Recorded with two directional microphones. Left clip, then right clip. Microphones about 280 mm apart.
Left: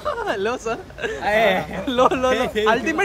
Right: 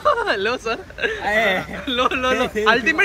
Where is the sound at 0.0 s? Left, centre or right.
Centre.